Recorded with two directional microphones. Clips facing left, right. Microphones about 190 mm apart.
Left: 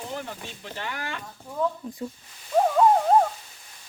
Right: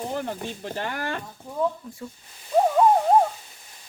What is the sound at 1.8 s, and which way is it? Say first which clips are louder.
Speech: left 4 dB; 20° left (ahead or behind).